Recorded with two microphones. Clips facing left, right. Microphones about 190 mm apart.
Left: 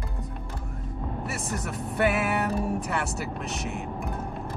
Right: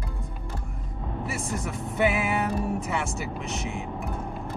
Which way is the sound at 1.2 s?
Centre (ahead or behind).